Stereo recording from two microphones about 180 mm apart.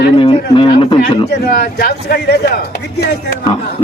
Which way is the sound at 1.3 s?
65° left (ahead or behind).